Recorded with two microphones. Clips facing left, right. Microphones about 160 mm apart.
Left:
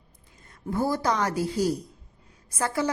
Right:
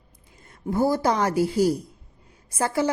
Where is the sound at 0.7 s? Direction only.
30° right (ahead or behind).